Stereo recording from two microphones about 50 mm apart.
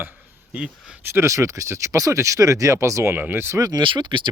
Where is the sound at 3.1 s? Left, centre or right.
Right.